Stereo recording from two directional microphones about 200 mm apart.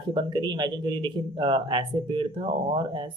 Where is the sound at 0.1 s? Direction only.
25° right (ahead or behind).